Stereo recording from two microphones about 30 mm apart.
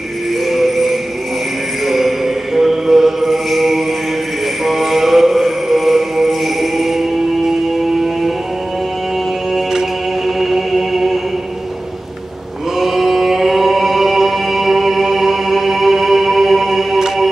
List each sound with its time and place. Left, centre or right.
0.5 s jingle bell: centre
1.9 s mantra: centre
4.6 s music: centre
9.5 s music: centre
10.4 s chant: centre
12.7 s music: centre